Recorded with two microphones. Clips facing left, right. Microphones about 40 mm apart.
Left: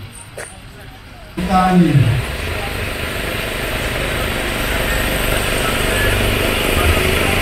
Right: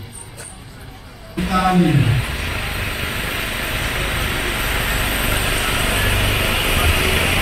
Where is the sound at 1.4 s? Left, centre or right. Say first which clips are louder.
Left 3 dB; centre.